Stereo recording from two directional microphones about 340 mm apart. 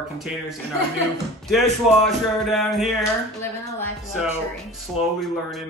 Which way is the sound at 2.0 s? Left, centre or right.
Centre.